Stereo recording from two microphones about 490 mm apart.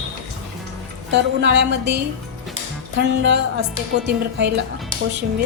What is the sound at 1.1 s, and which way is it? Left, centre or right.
Speech, right.